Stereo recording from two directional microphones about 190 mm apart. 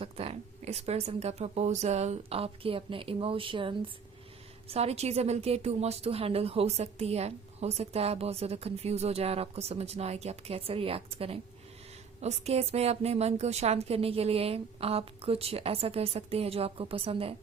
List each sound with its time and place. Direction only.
0.0 s a woman's voice: 30° right (ahead or behind)